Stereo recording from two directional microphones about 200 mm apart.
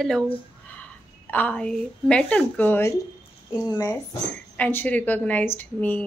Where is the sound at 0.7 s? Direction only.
5° left (ahead or behind).